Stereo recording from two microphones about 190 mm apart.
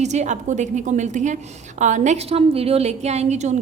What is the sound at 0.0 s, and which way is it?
A woman's voice, 40° right (ahead or behind).